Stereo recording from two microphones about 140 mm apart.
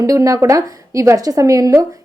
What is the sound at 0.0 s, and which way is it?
A woman's voice, 25° right (ahead or behind).